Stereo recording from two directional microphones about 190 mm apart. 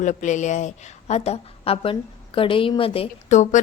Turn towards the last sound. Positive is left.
turn(degrees=40)  # may be behind; listen again after turning